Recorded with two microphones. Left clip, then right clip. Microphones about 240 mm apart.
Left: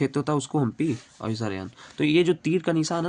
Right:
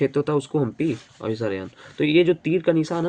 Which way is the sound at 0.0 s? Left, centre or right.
Left.